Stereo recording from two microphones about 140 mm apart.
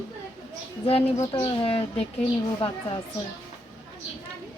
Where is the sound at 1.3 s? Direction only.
40° left (ahead or behind).